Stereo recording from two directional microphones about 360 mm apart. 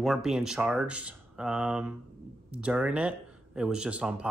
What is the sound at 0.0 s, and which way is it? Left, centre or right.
A man's voice, centre.